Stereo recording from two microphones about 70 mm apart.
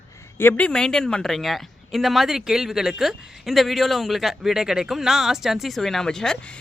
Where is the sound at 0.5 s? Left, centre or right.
Centre.